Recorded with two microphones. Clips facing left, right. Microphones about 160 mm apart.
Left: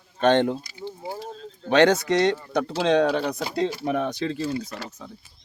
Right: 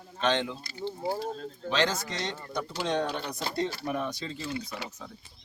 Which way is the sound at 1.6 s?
65° left (ahead or behind).